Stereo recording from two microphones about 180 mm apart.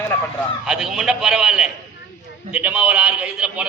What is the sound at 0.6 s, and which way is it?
A man's voice, centre (ahead or behind).